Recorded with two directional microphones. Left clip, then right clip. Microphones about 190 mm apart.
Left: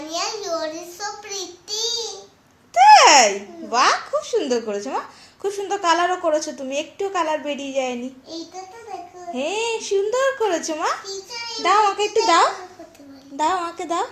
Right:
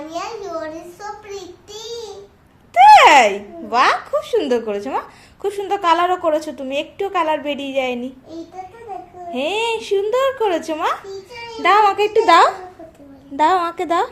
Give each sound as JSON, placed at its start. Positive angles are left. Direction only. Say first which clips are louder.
{"t": 0.1, "sound": "child singing", "louder": "left 2 dB", "side_deg": 0}
{"t": 2.7, "sound": "a child's voice", "louder": "right 3 dB", "side_deg": -10}
{"t": 9.3, "sound": "a child's voice", "louder": "right 4 dB", "side_deg": -10}